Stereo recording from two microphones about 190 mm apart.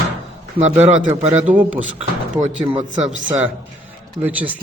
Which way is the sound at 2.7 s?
35° right (ahead or behind).